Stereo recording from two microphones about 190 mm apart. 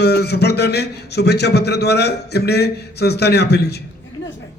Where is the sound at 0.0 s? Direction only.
60° left (ahead or behind).